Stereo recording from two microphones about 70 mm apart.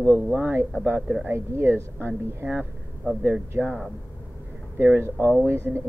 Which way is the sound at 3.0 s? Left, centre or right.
Right.